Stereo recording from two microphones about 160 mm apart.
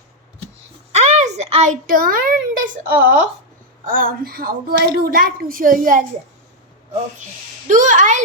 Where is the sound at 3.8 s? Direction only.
60° right (ahead or behind).